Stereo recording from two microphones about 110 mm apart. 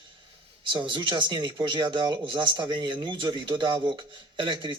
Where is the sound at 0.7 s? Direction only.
45° right (ahead or behind).